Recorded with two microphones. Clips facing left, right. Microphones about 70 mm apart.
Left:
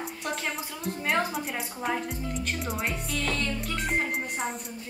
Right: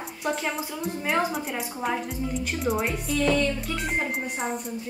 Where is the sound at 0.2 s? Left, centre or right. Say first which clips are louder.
Right 6 dB; centre.